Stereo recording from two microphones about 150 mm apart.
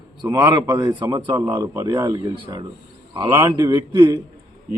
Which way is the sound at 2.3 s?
35° right (ahead or behind).